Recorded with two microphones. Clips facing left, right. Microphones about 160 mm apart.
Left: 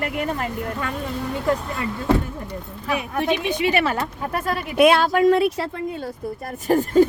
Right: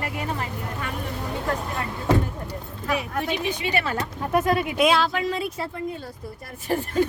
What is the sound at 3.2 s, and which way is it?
Speech, 75° left (ahead or behind).